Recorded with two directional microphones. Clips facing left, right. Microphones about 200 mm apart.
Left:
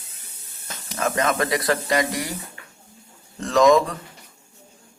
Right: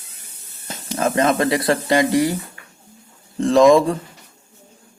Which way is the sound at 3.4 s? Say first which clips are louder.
Right 4 dB; 30° right (ahead or behind).